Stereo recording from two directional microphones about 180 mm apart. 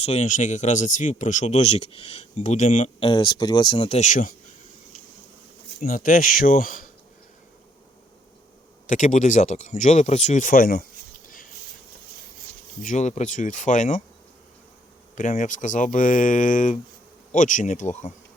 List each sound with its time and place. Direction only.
0.0 s speech: 40° left (ahead or behind)
3.0 s speech: 25° left (ahead or behind)
3.9 s speech: 45° left (ahead or behind)
5.8 s speech: 50° left (ahead or behind)
8.9 s speech: 45° left (ahead or behind)
12.8 s speech: 45° left (ahead or behind)
15.1 s speech: 45° left (ahead or behind)